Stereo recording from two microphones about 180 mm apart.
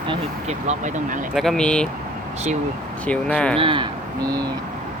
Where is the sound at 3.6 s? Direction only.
30° right (ahead or behind).